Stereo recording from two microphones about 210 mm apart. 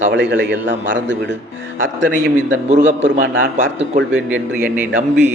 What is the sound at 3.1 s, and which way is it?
Speech, 35° right (ahead or behind).